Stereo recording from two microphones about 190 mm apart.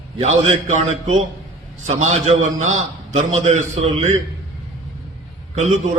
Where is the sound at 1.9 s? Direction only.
35° right (ahead or behind).